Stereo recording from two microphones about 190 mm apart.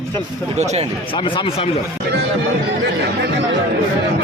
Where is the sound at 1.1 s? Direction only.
25° left (ahead or behind).